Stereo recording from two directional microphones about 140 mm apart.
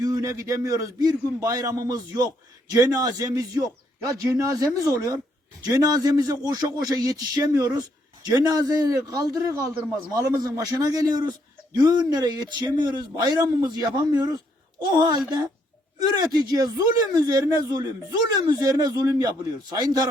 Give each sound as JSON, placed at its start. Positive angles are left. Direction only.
{"t": 0.0, "sound": "a man's voice", "side_deg": -25}
{"t": 16.3, "sound": "a man's voice", "side_deg": -30}